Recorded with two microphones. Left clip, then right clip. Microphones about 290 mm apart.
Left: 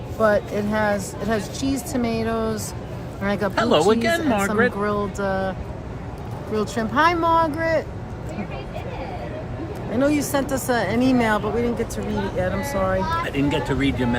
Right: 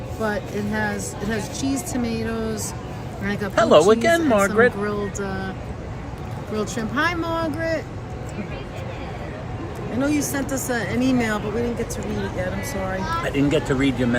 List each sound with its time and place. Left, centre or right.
0.2 s a woman's voice: centre
3.5 s speech: centre
4.8 s speech: centre
6.6 s speech: centre
10.0 s a woman's voice: centre
13.2 s speech: centre